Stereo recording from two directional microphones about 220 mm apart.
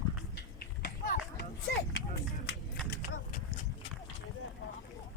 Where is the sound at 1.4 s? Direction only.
50° left (ahead or behind).